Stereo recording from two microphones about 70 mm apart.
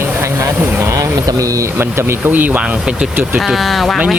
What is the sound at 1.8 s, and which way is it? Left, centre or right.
Speech, right.